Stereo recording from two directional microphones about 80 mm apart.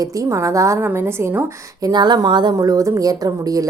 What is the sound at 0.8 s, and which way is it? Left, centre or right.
Speech, right.